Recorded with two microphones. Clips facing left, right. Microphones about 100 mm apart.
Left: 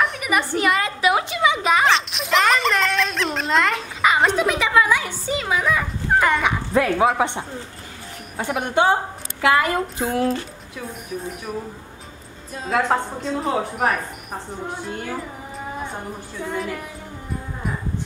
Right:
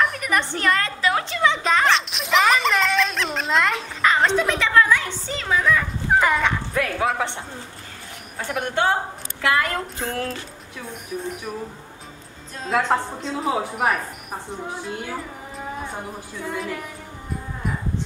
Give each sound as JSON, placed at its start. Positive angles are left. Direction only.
{"t": 0.0, "sound": "a sound", "side_deg": 5}
{"t": 4.1, "sound": "a woman's voice", "side_deg": 10}
{"t": 6.1, "sound": "speech", "side_deg": 0}
{"t": 6.7, "sound": "a woman's voice", "side_deg": 25}
{"t": 10.9, "sound": "a woman's voice", "side_deg": 0}
{"t": 12.5, "sound": "a woman's voice", "side_deg": 5}
{"t": 16.4, "sound": "a woman's voice", "side_deg": 0}